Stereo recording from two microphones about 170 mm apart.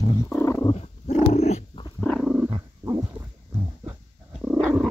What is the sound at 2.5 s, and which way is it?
Wild animals, 20° right (ahead or behind).